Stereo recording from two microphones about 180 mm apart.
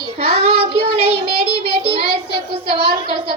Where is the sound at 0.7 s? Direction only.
70° left (ahead or behind).